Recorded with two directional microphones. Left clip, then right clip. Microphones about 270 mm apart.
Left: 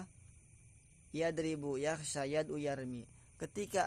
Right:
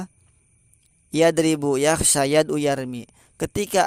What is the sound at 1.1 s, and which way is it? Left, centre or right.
Speech, right.